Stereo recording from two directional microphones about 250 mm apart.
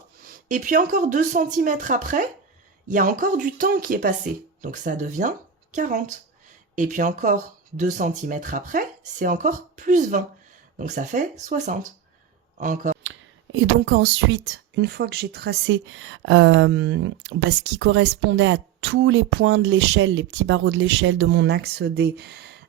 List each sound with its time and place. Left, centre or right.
0.3 s speech: right
13.1 s speech: right